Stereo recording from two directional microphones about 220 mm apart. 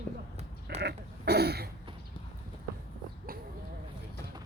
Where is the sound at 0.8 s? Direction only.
50° right (ahead or behind).